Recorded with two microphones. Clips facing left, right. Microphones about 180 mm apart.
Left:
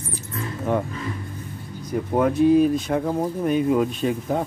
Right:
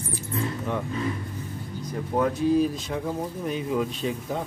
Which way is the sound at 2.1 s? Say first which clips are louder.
Left 5 dB; 60° left (ahead or behind).